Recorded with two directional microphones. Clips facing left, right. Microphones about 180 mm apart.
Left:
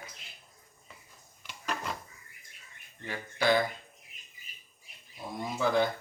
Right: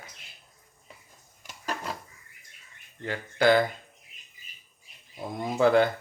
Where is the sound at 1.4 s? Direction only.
45° right (ahead or behind).